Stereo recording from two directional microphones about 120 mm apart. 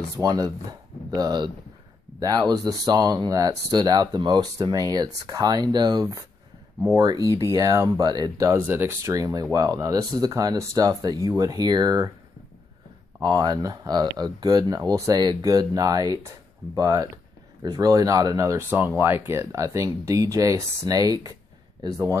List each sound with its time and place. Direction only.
0.2 s speech: 35° right (ahead or behind)
13.2 s speech: 35° right (ahead or behind)